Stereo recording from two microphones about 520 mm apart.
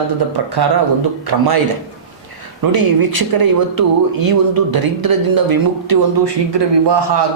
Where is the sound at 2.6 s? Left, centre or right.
Right.